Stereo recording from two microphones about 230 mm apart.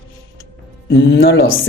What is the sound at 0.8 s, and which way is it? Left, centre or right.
Speech, left.